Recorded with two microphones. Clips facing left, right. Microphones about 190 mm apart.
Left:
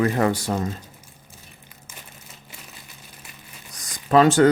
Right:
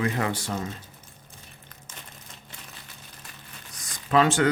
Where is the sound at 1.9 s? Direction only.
10° left (ahead or behind).